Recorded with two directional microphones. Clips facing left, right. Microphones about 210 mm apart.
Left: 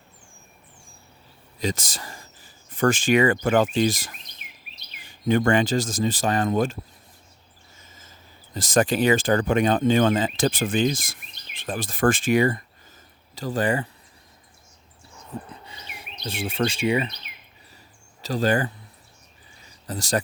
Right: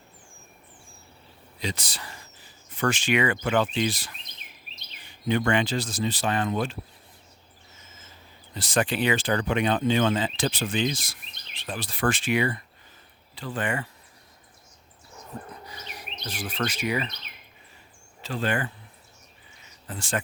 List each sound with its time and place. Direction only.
1.5 s speech: 45° left (ahead or behind)
5.3 s speech: 45° left (ahead or behind)
8.5 s speech: 45° left (ahead or behind)
15.3 s bird: 25° left (ahead or behind)
16.2 s speech: 25° left (ahead or behind)
18.2 s speech: 40° left (ahead or behind)
19.6 s a sound: 40° left (ahead or behind)